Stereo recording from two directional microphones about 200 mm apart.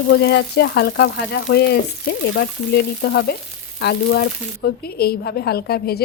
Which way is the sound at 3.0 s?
60° left (ahead or behind).